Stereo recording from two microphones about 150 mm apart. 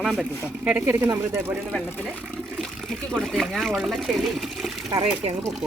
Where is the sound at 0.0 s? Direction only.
Centre (ahead or behind).